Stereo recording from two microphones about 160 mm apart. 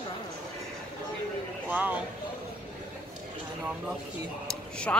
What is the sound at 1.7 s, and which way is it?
Speech, 10° right (ahead or behind).